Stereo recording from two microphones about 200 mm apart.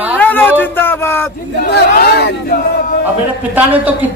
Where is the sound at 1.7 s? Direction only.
55° left (ahead or behind).